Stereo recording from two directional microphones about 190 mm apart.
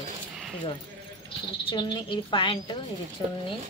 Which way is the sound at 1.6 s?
25° left (ahead or behind).